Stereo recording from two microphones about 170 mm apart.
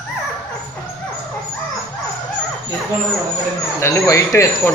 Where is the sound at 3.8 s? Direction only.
15° left (ahead or behind).